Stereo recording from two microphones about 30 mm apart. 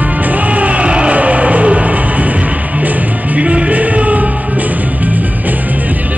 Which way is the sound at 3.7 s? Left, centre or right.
Right.